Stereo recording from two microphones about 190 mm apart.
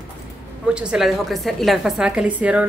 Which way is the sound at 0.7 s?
5° right (ahead or behind).